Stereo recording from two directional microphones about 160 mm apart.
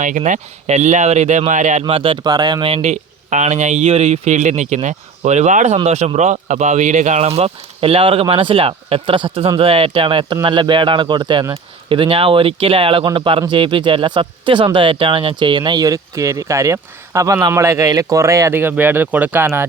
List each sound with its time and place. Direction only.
0.0 s speech: 50° right (ahead or behind)
1.8 s speech: 35° right (ahead or behind); by 19.6 s 15° right (ahead or behind)